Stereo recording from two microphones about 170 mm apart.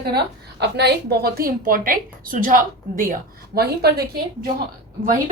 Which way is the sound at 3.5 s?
70° right (ahead or behind).